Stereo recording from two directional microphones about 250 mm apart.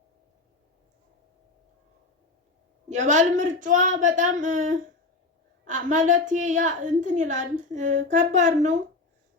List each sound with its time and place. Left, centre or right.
2.9 s a woman's voice: right